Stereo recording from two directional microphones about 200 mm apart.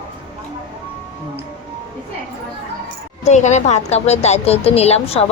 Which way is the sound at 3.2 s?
35° left (ahead or behind).